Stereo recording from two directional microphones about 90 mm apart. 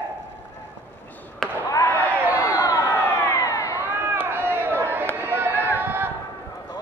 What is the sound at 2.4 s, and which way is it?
Crowd, 40° left (ahead or behind).